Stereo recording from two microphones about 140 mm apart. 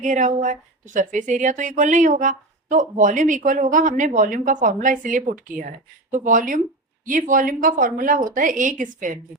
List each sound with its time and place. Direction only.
0.0 s a woman's voice: 60° right (ahead or behind)